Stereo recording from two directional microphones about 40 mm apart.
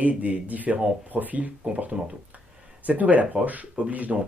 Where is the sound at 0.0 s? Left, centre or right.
Right.